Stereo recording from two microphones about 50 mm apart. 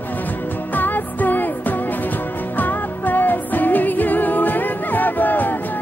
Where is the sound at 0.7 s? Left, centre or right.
Left.